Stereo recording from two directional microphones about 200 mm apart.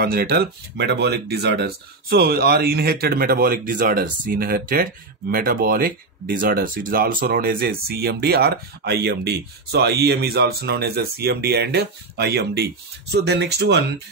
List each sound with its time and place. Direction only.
0.0 s speech: 50° right (ahead or behind)